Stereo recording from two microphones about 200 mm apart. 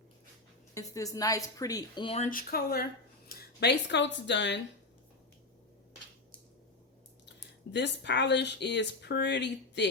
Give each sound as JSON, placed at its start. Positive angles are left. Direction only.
{"t": 0.7, "sound": "a woman's voice", "side_deg": 15}
{"t": 7.7, "sound": "speech", "side_deg": 60}